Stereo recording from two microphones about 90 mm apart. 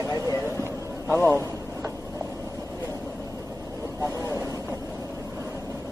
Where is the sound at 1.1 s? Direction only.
20° left (ahead or behind).